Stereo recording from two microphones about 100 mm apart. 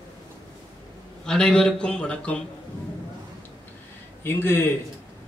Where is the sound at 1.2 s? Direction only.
5° left (ahead or behind).